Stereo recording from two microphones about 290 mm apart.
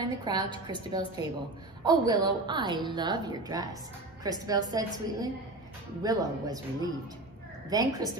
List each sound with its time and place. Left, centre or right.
0.0 s a woman's voice: centre